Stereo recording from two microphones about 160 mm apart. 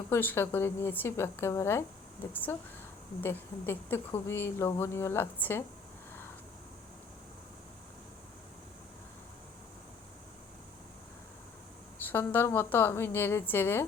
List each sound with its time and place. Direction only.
0.1 s speech: 15° left (ahead or behind)
12.0 s speech: 10° left (ahead or behind)